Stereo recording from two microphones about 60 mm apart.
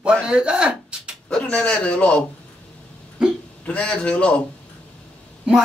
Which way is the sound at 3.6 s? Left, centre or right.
Left.